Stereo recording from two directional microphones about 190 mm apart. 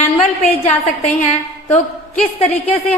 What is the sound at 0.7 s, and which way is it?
Speech, 35° left (ahead or behind).